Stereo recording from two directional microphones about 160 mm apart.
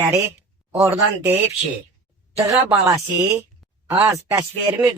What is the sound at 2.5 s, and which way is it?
A man's voice, 20° right (ahead or behind).